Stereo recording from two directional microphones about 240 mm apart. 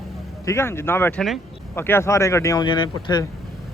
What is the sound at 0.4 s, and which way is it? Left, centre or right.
Speech, centre.